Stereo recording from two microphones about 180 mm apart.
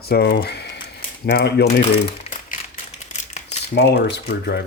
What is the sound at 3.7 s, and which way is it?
Speech, 65° left (ahead or behind).